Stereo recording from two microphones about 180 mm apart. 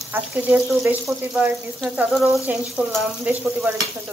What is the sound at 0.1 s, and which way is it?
Speech, 10° right (ahead or behind).